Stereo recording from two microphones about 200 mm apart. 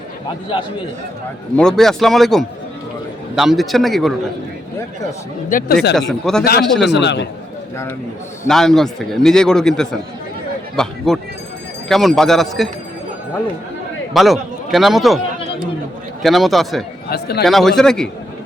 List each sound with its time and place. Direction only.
1.5 s a man's voice: centre (ahead or behind)
5.5 s speech: 45° left (ahead or behind)
6.0 s a man's voice: centre (ahead or behind)
6.8 s a man's voice: 60° left (ahead or behind)
8.4 s a man's voice: centre (ahead or behind)
14.1 s a man's voice: centre (ahead or behind)
16.2 s a man's voice: centre (ahead or behind)
17.1 s speech: 55° left (ahead or behind)
17.4 s a man's voice: centre (ahead or behind)